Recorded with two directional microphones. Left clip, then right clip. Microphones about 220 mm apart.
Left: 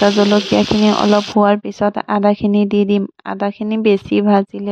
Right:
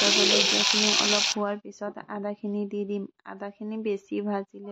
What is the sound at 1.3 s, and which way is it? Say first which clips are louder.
Speech: left 17 dB; 45° left (ahead or behind).